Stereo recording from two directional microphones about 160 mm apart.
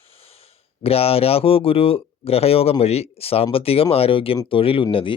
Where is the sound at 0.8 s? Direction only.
35° left (ahead or behind).